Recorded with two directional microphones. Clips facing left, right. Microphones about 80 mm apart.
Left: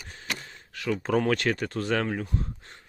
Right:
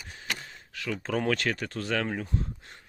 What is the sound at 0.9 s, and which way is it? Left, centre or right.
Speech, centre.